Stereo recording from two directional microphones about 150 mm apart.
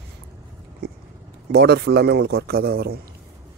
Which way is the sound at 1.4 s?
90° right.